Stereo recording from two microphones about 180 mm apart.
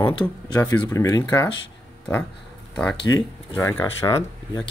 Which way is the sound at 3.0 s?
20° left (ahead or behind).